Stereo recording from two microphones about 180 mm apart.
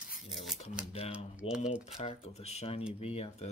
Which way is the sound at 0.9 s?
35° left (ahead or behind).